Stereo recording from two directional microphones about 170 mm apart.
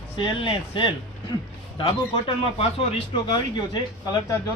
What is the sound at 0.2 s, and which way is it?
Speech, 30° left (ahead or behind).